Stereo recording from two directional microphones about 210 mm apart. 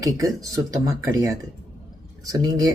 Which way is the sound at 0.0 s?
15° right (ahead or behind).